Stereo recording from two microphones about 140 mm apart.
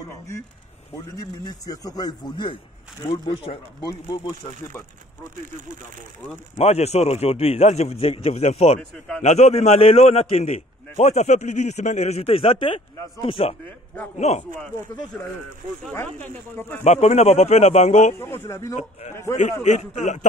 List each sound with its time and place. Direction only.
1.1 s a man's voice: 25° left (ahead or behind)
6.5 s a man's voice: 50° left (ahead or behind)
14.2 s a man's voice: 50° left (ahead or behind)
15.2 s speech: 15° left (ahead or behind)
16.8 s a man's voice: 50° left (ahead or behind)
18.2 s a man's voice: 20° left (ahead or behind)
19.6 s speech: 55° left (ahead or behind)